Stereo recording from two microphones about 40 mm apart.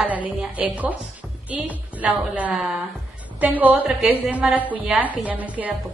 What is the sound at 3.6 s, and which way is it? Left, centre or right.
Speech, right.